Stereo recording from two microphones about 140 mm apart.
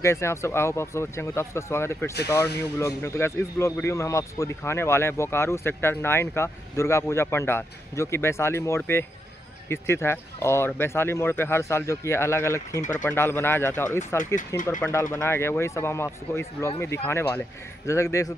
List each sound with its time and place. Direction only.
0.0 s speech: 20° left (ahead or behind)